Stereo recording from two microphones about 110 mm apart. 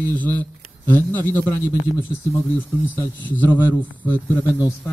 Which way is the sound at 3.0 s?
15° left (ahead or behind).